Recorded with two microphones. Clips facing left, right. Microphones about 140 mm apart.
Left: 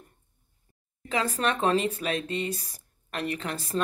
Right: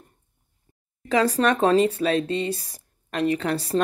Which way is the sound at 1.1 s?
40° right (ahead or behind).